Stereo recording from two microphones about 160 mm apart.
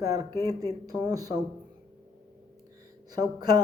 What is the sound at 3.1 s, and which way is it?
Speech, 25° right (ahead or behind).